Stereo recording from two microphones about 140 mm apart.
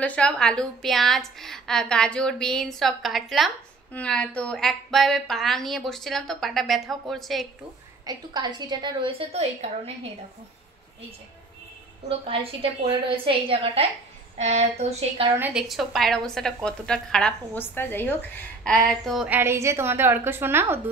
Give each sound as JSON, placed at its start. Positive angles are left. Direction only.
{"t": 0.0, "sound": "a woman's voice", "side_deg": 10}
{"t": 8.0, "sound": "a woman's voice", "side_deg": -30}
{"t": 12.8, "sound": "a woman's voice", "side_deg": -40}
{"t": 14.4, "sound": "speech", "side_deg": -50}
{"t": 15.5, "sound": "a woman's voice", "side_deg": 0}
{"t": 19.2, "sound": "a woman's voice", "side_deg": -15}